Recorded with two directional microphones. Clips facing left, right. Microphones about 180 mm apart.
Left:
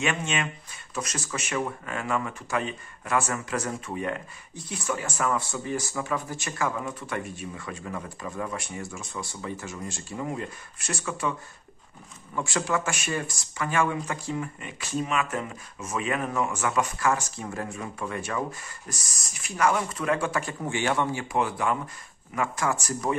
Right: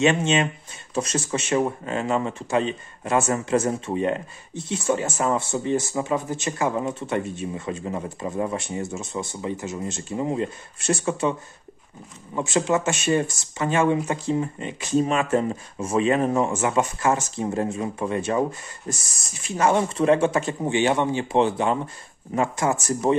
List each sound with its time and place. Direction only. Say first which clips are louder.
0.0 s speech: right 8 dB; 25° right (ahead or behind)
12.4 s speech: right 6 dB; 20° right (ahead or behind)